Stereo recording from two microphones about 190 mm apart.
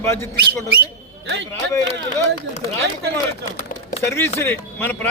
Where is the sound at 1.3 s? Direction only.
65° right (ahead or behind).